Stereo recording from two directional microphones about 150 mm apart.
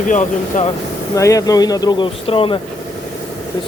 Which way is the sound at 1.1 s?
20° left (ahead or behind).